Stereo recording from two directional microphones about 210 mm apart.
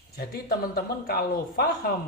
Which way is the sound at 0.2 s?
45° left (ahead or behind).